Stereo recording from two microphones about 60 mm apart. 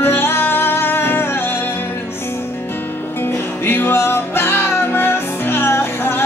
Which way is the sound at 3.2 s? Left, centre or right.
Left.